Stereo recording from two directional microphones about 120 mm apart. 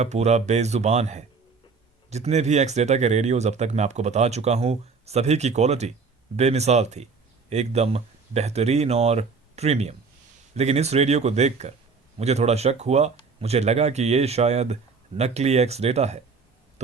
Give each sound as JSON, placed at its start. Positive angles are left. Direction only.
{"t": 0.0, "sound": "speech", "side_deg": -65}